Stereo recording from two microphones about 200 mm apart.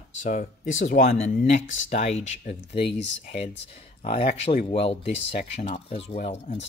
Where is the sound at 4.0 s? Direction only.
45° left (ahead or behind).